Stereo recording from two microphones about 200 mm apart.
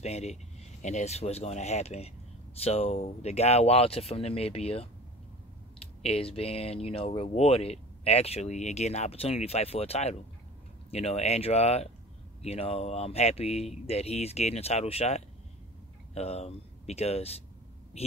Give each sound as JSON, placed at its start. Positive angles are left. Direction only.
{"t": 0.0, "sound": "a woman's voice", "side_deg": 35}